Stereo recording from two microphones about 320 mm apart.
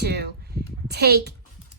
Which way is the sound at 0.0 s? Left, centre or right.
Right.